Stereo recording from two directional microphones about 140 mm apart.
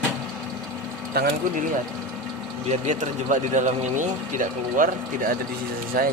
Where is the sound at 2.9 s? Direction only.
60° right (ahead or behind).